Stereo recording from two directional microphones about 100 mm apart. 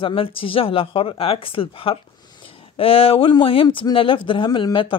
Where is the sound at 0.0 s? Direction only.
65° left (ahead or behind).